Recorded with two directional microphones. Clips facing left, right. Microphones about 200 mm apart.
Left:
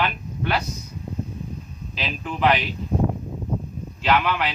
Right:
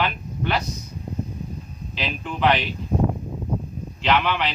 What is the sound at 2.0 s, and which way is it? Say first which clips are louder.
Speech: even; 5° left (ahead or behind).